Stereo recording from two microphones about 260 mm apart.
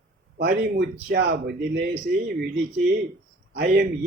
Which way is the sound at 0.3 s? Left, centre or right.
Right.